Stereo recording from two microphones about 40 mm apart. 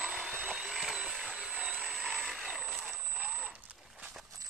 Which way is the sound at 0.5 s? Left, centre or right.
Centre.